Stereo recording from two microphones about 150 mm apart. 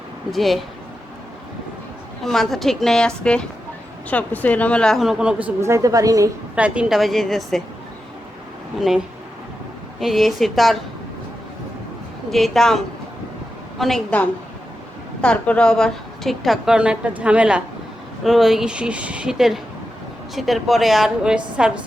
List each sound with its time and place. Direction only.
0.3 s a woman's voice: centre (ahead or behind)
2.2 s a woman's voice: centre (ahead or behind)
4.1 s speech: 10° left (ahead or behind); by 5.4 s 5° right (ahead or behind)
5.5 s a woman's voice: 20° right (ahead or behind)
6.6 s a woman's voice: 10° right (ahead or behind)
10.0 s a woman's voice: centre (ahead or behind)
12.3 s a woman's voice: centre (ahead or behind)